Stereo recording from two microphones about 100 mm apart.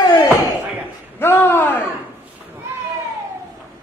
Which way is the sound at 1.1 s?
25° left (ahead or behind).